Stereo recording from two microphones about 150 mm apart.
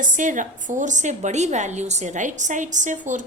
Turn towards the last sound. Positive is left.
turn(degrees=-55)  # may be behind; listen again after turning